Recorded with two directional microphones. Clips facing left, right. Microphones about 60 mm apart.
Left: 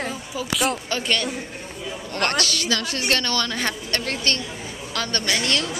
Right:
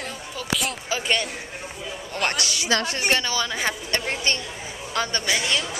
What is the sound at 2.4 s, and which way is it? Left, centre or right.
Speech, centre.